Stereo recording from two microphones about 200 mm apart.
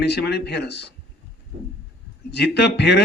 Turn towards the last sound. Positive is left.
turn(degrees=55)  # may be behind; listen again after turning